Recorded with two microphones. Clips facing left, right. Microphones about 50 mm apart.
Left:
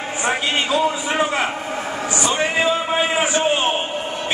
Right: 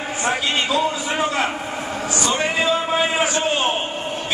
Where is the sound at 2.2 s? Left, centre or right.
Centre.